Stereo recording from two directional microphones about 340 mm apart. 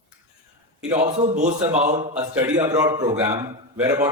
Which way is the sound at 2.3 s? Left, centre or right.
Centre.